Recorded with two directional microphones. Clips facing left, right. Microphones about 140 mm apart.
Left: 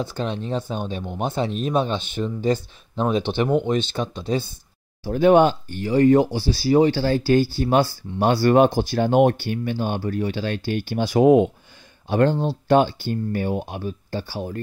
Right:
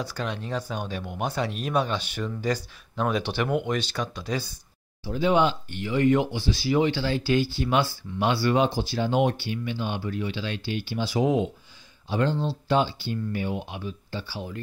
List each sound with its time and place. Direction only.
0.0 s speech: 25° left (ahead or behind)
5.0 s speech: 55° left (ahead or behind)